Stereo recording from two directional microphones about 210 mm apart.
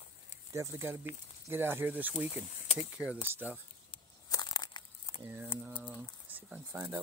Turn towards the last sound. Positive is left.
turn(degrees=-10)  # may be behind; listen again after turning